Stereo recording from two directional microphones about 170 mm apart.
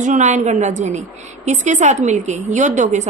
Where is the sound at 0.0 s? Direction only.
45° right (ahead or behind).